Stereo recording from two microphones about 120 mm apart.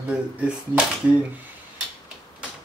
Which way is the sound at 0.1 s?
10° right (ahead or behind).